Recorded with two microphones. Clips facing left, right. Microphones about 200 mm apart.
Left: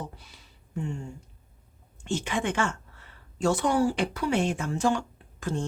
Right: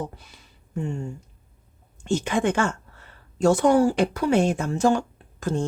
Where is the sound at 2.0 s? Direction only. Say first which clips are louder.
Right 6 dB; 40° right (ahead or behind).